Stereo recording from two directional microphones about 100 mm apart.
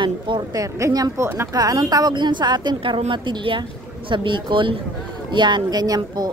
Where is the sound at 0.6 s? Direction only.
35° right (ahead or behind).